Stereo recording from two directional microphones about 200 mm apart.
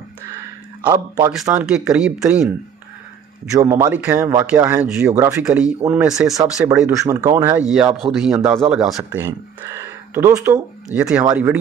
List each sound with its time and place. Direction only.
0.8 s speech: 20° right (ahead or behind)
1.5 s speech: 5° right (ahead or behind)
3.5 s speech: 15° right (ahead or behind)
9.2 s speech: 15° right (ahead or behind)